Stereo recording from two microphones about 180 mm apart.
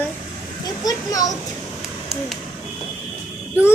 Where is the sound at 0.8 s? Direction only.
20° left (ahead or behind).